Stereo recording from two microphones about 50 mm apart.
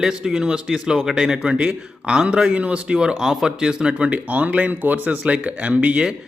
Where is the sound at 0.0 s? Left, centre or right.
Centre.